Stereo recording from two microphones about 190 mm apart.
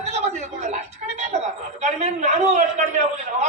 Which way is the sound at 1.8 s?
35° right (ahead or behind).